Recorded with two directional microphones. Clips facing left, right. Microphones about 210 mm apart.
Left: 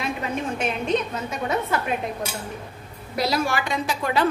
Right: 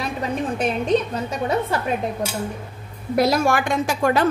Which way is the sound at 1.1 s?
35° right (ahead or behind).